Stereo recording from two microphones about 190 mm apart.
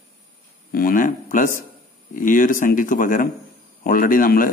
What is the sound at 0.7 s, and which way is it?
Speech, 50° left (ahead or behind).